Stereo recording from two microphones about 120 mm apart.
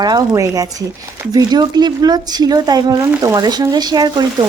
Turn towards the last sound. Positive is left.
turn(degrees=-35)  # may be behind; listen again after turning